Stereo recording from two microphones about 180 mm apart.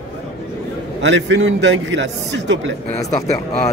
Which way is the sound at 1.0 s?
85° right.